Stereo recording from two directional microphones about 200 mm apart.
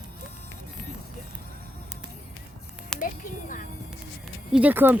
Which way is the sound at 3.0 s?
40° left (ahead or behind).